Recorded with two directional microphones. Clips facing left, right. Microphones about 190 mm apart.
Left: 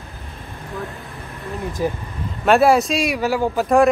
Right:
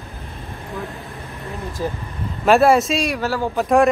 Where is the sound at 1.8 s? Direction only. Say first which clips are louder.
Left 3 dB; 15° left (ahead or behind).